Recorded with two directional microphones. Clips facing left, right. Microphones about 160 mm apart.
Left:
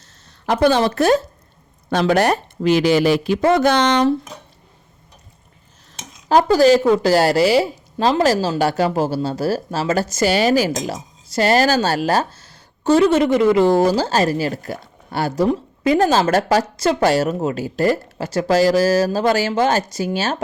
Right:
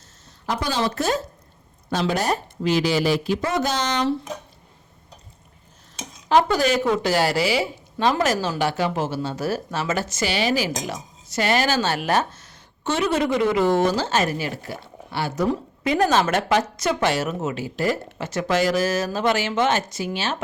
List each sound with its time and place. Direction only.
0.4 s speech: 60° left (ahead or behind)
6.2 s speech: 35° left (ahead or behind)
16.0 s speech: 30° left (ahead or behind)